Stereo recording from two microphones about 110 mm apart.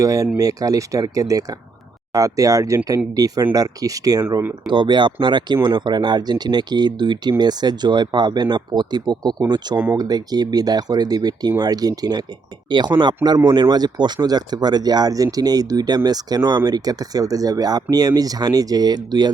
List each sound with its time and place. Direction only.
0.0 s speech: 30° right (ahead or behind)
9.7 s speech: 15° right (ahead or behind)
10.0 s speech: 40° right (ahead or behind)